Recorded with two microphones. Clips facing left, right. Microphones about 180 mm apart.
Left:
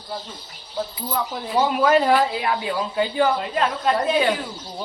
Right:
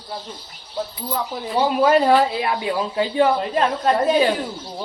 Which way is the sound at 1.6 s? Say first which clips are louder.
Right 2 dB; 30° right (ahead or behind).